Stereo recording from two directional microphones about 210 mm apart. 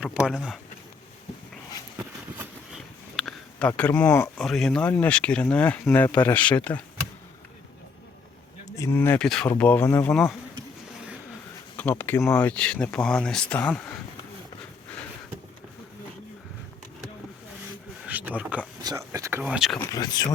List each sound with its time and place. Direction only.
0.0 s speech: 5° right (ahead or behind)
2.0 s a sound: 5° right (ahead or behind)
4.4 s speech: centre (ahead or behind)
8.7 s speech: 15° left (ahead or behind)
11.8 s speech: 10° left (ahead or behind)
18.0 s a sound: 5° right (ahead or behind)
18.8 s speech: 15° right (ahead or behind)
19.5 s speech: centre (ahead or behind)
19.8 s speech: 15° left (ahead or behind)